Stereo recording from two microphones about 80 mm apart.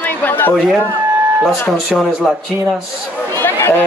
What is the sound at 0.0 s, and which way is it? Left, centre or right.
Chatter, left.